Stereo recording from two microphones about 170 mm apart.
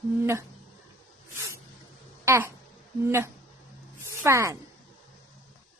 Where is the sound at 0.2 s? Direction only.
15° right (ahead or behind).